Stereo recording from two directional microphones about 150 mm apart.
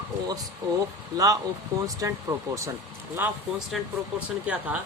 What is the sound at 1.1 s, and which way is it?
Speech, 25° right (ahead or behind).